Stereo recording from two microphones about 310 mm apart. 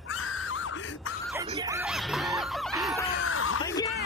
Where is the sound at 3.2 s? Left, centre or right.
Left.